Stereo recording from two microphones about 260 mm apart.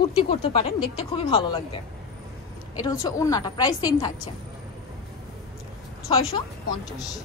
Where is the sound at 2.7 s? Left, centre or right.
Centre.